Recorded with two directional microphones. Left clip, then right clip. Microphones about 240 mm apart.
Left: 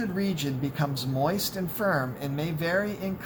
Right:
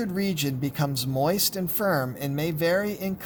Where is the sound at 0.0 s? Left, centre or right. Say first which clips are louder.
Right 2 dB; right.